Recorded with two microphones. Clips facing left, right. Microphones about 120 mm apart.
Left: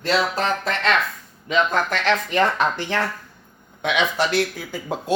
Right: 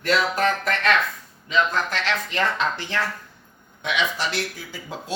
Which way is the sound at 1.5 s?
55° left (ahead or behind).